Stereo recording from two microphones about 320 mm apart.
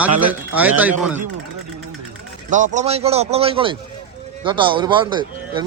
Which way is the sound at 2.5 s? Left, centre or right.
Right.